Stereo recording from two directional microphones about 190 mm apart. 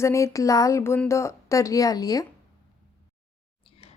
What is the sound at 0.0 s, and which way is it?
A woman's voice, 15° left (ahead or behind).